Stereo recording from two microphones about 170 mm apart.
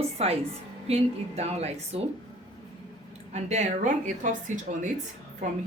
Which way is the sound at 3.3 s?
40° right (ahead or behind).